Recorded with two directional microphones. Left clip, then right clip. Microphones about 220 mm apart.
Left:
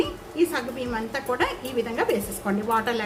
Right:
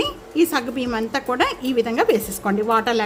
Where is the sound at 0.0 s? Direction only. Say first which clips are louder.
Right 4 dB; 50° right (ahead or behind).